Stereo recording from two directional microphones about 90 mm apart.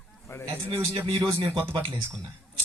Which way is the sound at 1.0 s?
75° right (ahead or behind).